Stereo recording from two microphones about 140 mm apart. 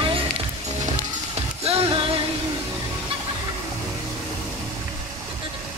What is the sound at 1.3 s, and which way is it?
Music, 45° right (ahead or behind).